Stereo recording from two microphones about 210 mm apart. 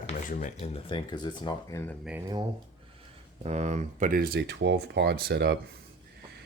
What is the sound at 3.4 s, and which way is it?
Speech, 30° right (ahead or behind).